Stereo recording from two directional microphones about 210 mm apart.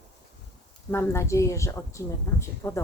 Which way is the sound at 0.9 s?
10° left (ahead or behind).